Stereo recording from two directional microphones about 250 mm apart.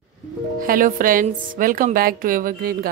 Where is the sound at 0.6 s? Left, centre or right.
Right.